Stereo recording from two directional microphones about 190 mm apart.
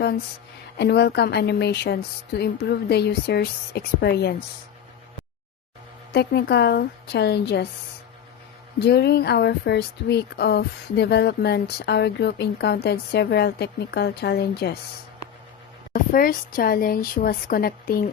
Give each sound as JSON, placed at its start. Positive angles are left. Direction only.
{"t": 0.8, "sound": "speech", "side_deg": 60}
{"t": 6.1, "sound": "speech", "side_deg": 60}
{"t": 8.8, "sound": "speech", "side_deg": 60}
{"t": 16.1, "sound": "a woman's voice", "side_deg": 50}